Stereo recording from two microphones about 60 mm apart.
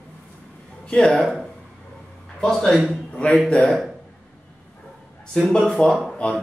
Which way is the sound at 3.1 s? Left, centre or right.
Centre.